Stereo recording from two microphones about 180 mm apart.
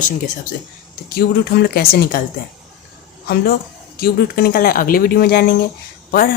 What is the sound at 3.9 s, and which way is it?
Speech, 55° left (ahead or behind).